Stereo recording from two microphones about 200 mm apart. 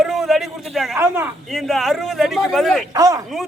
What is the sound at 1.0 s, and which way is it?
Speech, 10° right (ahead or behind).